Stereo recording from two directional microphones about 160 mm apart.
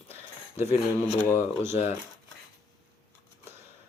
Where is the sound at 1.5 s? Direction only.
15° right (ahead or behind).